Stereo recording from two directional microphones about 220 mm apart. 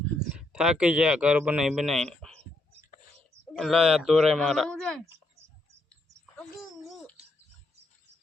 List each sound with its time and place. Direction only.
0.3 s speech: 5° right (ahead or behind)
3.5 s speech: centre (ahead or behind)
5.9 s a sound: 5° left (ahead or behind)